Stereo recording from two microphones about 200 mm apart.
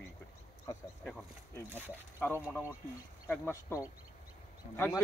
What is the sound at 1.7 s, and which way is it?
Speech, 10° right (ahead or behind).